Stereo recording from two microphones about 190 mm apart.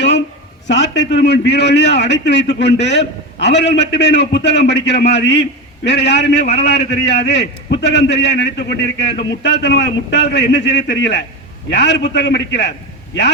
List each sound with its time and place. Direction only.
0.7 s a man's voice: 65° left (ahead or behind)
6.4 s a man's voice: 35° left (ahead or behind)
7.0 s a man's voice: 65° left (ahead or behind)